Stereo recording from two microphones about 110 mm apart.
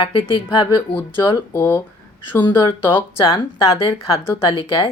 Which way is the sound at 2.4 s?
45° left (ahead or behind).